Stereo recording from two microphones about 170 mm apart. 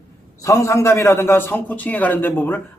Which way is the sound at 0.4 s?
20° left (ahead or behind).